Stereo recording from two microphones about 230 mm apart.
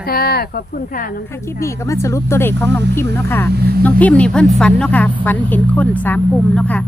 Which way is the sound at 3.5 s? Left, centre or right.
Right.